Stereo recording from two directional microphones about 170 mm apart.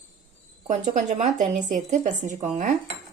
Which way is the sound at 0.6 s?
45° right (ahead or behind).